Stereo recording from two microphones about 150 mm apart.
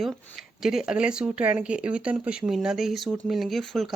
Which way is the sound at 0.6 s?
5° right (ahead or behind).